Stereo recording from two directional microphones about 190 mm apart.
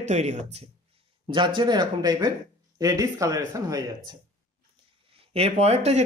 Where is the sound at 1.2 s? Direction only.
25° right (ahead or behind).